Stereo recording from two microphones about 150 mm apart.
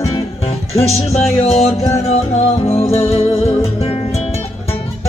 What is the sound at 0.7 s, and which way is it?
Music, 45° left (ahead or behind).